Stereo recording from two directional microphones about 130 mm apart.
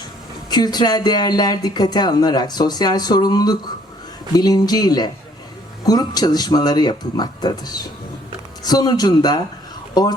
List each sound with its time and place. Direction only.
0.5 s speech: 30° left (ahead or behind)